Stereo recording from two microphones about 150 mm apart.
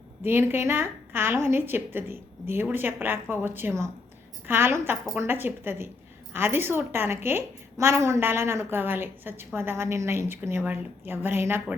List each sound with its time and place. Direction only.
0.2 s a woman's voice: 15° right (ahead or behind)